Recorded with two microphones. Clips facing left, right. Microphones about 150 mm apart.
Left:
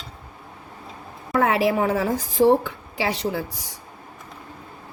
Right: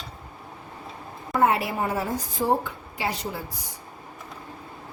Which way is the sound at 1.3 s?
90° left.